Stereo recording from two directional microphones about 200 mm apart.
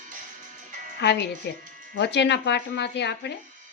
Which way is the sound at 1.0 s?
60° left (ahead or behind).